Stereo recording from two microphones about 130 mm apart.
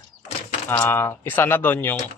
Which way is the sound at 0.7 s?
15° left (ahead or behind).